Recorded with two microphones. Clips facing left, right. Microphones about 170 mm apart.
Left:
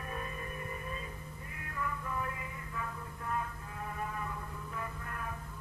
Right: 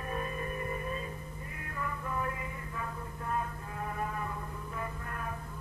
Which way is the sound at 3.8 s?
55° right (ahead or behind).